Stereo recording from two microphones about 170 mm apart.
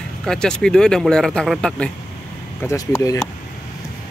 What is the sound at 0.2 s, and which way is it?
Speech, 5° left (ahead or behind).